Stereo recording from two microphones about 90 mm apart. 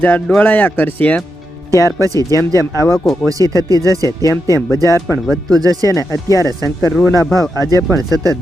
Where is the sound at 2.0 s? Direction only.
40° right (ahead or behind).